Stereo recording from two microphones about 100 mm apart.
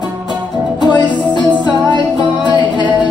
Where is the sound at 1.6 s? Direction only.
50° left (ahead or behind).